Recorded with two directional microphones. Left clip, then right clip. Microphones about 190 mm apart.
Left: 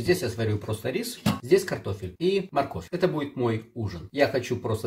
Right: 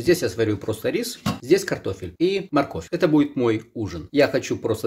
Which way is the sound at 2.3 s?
50° right (ahead or behind).